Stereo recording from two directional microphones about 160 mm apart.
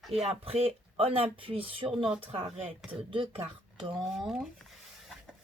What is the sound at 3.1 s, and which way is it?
Speech, 30° right (ahead or behind).